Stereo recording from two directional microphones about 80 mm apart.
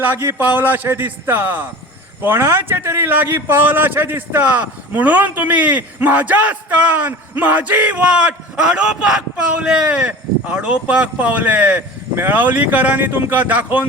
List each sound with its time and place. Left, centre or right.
0.0 s a man's voice: right